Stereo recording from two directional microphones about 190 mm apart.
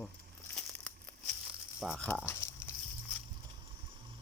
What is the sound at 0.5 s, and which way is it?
Crumpling, 5° left (ahead or behind).